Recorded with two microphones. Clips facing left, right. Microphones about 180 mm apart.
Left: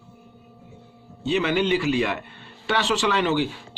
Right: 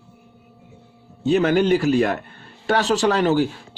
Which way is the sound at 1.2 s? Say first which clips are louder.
Right 5 dB; 45° right (ahead or behind).